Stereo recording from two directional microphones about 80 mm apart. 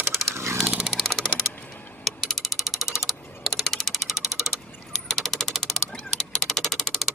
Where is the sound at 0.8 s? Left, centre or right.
Centre.